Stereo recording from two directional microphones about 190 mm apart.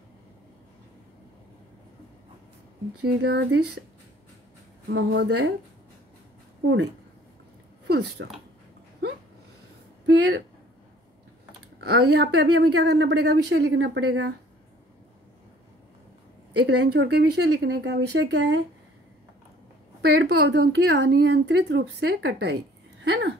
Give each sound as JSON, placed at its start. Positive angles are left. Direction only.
{"t": 3.1, "sound": "a woman's voice", "side_deg": -65}
{"t": 4.8, "sound": "a woman's voice", "side_deg": -70}
{"t": 8.2, "sound": "speech", "side_deg": -70}
{"t": 10.0, "sound": "speech", "side_deg": -65}
{"t": 11.8, "sound": "a woman's voice", "side_deg": -60}
{"t": 16.5, "sound": "a woman's voice", "side_deg": -60}
{"t": 20.1, "sound": "a woman's voice", "side_deg": -65}